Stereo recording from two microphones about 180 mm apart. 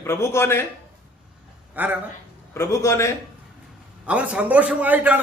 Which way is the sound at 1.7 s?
10° right (ahead or behind).